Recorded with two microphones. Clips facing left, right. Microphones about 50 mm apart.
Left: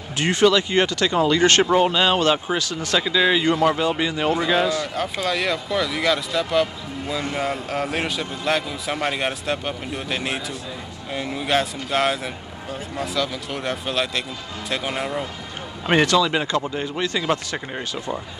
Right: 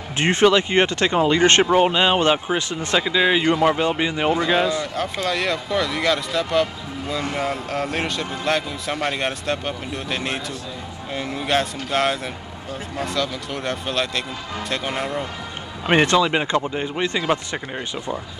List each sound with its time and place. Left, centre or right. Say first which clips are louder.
0.2 s speech: right 1 dB; right
3.0 s speech: even; centre
4.9 s a man's voice: even; centre
16.1 s speech: right 1 dB; right